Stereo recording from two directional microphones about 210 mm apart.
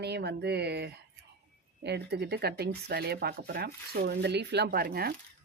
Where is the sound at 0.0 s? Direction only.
50° right (ahead or behind).